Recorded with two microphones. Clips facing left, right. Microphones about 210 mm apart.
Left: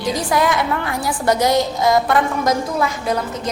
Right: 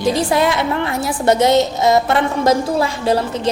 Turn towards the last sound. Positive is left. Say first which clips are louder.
# right 5 dB
turn(degrees=-30)  # may be behind; listen again after turning